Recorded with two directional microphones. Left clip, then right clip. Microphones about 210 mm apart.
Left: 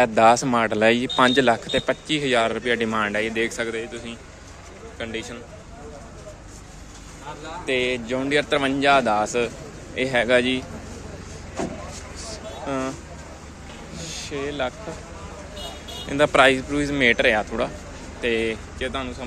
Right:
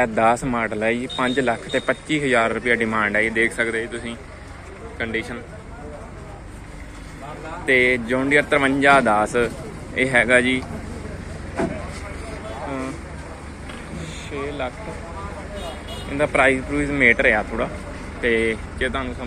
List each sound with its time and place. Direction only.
0.0 s speech: 30° left (ahead or behind)
1.7 s a man's voice: 20° left (ahead or behind); by 5.4 s 5° left (ahead or behind)
7.6 s speech: 5° left (ahead or behind); by 10.6 s 25° left (ahead or behind)
14.3 s speech: 40° left (ahead or behind)
16.1 s speech: 40° left (ahead or behind); by 19.1 s 15° left (ahead or behind)